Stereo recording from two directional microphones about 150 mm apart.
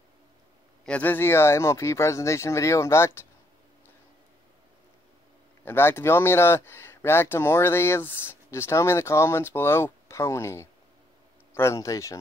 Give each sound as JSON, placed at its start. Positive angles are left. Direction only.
{"t": 0.8, "sound": "speech", "side_deg": 10}
{"t": 5.7, "sound": "speech", "side_deg": 15}